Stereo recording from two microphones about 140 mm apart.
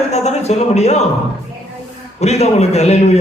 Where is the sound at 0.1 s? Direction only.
50° left (ahead or behind).